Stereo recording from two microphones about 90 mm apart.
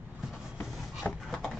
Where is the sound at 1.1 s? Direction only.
20° left (ahead or behind).